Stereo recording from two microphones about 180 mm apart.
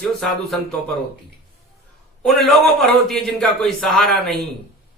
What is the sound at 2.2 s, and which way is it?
Speech, centre (ahead or behind).